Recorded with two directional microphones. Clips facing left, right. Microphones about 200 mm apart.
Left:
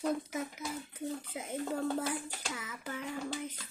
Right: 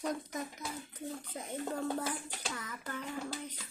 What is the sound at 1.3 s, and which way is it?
A child's voice, 10° left (ahead or behind).